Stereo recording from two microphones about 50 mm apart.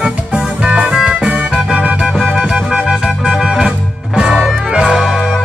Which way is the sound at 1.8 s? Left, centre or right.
Right.